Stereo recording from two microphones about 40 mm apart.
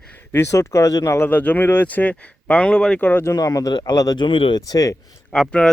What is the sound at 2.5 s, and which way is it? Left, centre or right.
Speech, left.